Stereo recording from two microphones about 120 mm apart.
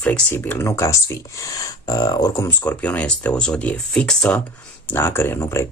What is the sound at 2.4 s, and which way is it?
Speech, 15° left (ahead or behind).